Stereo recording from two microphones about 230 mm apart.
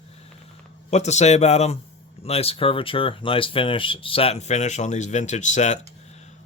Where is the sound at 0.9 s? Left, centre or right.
Left.